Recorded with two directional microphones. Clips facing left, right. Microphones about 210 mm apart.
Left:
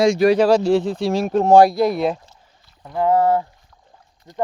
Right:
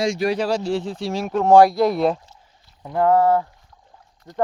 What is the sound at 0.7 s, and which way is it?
Speech, 65° left (ahead or behind).